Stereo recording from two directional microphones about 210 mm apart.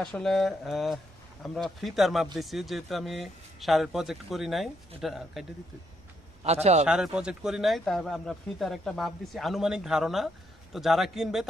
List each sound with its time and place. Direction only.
0.0 s speech: centre (ahead or behind)
6.4 s a man's voice: 30° right (ahead or behind)
6.9 s speech: 5° right (ahead or behind)